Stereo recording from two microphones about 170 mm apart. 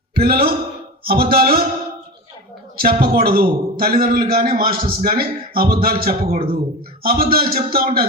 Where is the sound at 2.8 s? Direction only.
65° right (ahead or behind).